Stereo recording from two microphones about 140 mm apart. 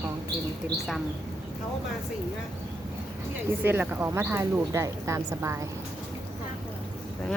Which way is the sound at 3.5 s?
15° right (ahead or behind).